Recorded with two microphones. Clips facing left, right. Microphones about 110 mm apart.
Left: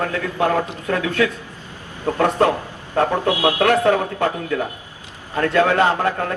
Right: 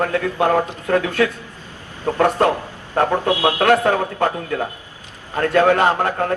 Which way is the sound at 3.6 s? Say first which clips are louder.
Even; 45° right (ahead or behind).